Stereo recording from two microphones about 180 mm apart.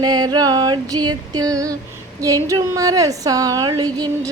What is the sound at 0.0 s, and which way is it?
A woman's voice, 20° right (ahead or behind).